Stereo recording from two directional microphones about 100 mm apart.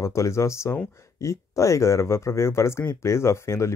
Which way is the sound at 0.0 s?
30° left (ahead or behind).